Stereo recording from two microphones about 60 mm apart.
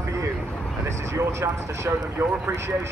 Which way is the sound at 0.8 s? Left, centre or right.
Right.